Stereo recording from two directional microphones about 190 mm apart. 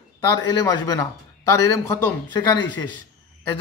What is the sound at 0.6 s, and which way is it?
Speech, 15° left (ahead or behind).